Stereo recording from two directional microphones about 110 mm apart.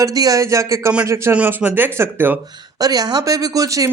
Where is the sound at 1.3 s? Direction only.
10° right (ahead or behind).